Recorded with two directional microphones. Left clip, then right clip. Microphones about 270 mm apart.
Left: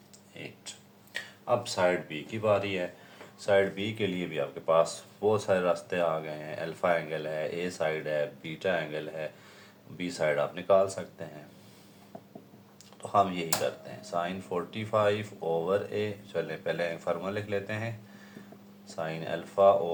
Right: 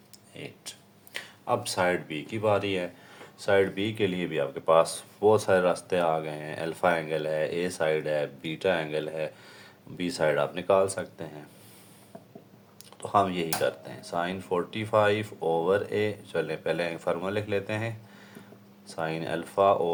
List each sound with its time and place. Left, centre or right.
0.3 s speech: right
13.0 s speech: right